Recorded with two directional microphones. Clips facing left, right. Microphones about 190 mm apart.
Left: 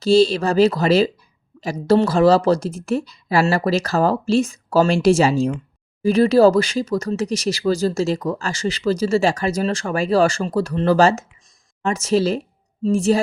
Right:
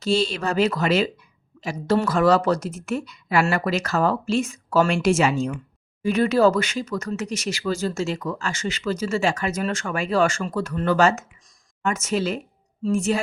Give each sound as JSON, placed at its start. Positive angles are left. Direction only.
{"t": 0.0, "sound": "speech", "side_deg": 35}